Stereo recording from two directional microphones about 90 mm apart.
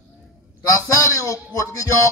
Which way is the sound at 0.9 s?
35° left (ahead or behind).